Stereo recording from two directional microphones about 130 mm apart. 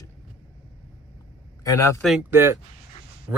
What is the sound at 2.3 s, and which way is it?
Speech, 20° right (ahead or behind).